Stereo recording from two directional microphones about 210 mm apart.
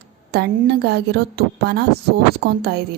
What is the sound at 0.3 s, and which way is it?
Speech, 50° right (ahead or behind).